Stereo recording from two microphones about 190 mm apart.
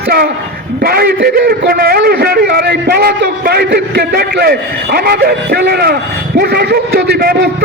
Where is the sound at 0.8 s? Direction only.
55° right (ahead or behind).